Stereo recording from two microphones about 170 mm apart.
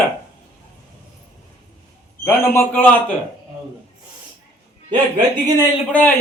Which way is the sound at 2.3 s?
15° left (ahead or behind).